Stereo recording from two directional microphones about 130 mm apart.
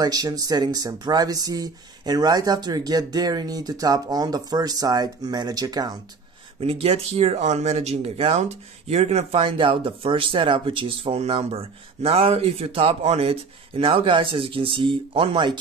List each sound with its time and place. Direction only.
0.0 s speech: 30° right (ahead or behind)
6.6 s speech: 50° right (ahead or behind)